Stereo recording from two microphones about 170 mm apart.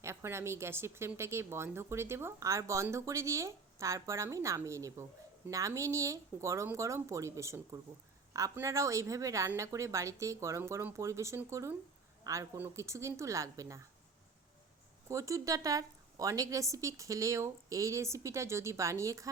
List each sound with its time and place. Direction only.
0.0 s speech: 15° right (ahead or behind)
15.1 s a woman's voice: 20° right (ahead or behind)